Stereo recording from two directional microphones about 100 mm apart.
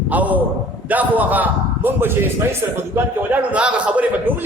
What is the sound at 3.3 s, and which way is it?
A man's voice, 15° right (ahead or behind).